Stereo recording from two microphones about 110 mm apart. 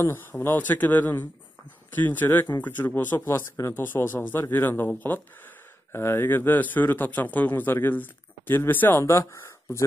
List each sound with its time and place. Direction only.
0.0 s speech: 20° left (ahead or behind)